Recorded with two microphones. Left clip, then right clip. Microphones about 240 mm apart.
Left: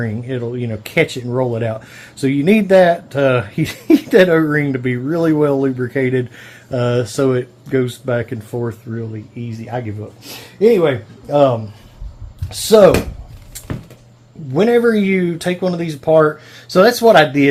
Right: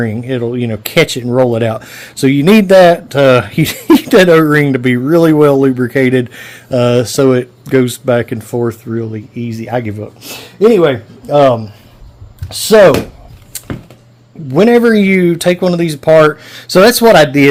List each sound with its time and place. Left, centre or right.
0.0 s speech: right
14.5 s speech: right